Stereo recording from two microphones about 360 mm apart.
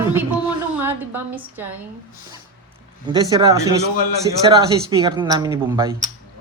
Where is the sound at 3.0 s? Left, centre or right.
Centre.